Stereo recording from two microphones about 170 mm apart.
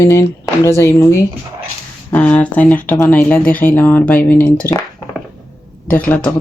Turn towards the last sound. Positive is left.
turn(degrees=10)  # may be behind; listen again after turning